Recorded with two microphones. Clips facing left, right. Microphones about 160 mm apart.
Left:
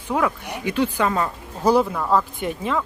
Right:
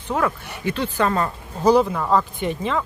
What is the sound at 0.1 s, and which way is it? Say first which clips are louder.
Speech: left 1 dB; 10° left (ahead or behind).